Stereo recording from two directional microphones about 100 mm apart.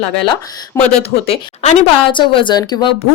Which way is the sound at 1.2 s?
85° left.